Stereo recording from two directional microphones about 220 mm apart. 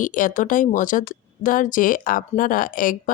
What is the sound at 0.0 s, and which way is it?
A woman's voice, 35° left (ahead or behind).